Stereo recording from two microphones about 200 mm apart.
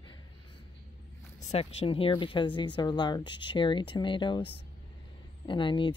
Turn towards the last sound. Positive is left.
turn(degrees=25)  # may be behind; listen again after turning